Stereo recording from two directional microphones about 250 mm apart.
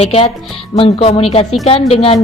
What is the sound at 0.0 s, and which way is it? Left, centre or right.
Speech, left.